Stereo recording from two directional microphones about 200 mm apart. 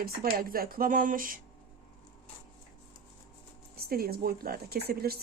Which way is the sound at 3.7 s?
50° right (ahead or behind).